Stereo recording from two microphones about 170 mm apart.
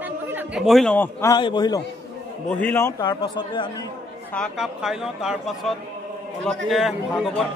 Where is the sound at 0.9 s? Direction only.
15° left (ahead or behind).